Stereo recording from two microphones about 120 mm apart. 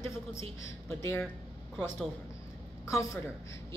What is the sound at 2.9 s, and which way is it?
Speech, 25° left (ahead or behind).